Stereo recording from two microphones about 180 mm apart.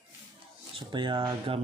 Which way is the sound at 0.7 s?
25° right (ahead or behind).